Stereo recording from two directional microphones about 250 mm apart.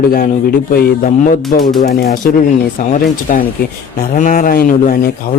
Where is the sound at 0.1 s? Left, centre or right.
Left.